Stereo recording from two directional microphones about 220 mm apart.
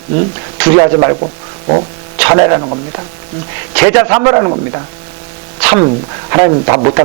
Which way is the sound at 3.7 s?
15° right (ahead or behind).